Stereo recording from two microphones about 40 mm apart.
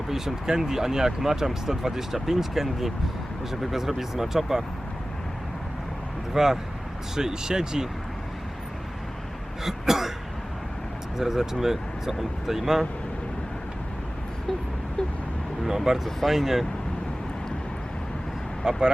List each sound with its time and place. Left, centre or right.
0.1 s speech: centre
6.3 s speech: centre
9.6 s speech: centre
11.2 s speech: centre
15.6 s speech: centre
18.6 s speech: centre